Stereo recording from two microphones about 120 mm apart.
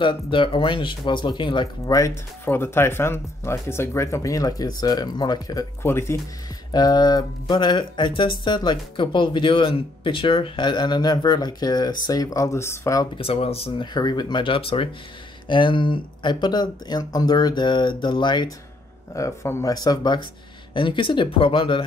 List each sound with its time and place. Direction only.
0.0 s speech: 45° left (ahead or behind); by 6.1 s 20° left (ahead or behind)
6.7 s speech: 35° left (ahead or behind)
13.2 s speech: 55° left (ahead or behind)
13.9 s speech: 35° left (ahead or behind)
19.1 s speech: 20° left (ahead or behind)
19.7 s speech: 35° left (ahead or behind)